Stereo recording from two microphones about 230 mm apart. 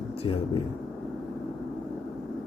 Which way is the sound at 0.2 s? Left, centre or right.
Left.